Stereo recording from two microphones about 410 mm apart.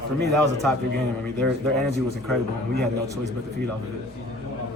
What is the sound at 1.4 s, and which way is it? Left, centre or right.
Speech, centre.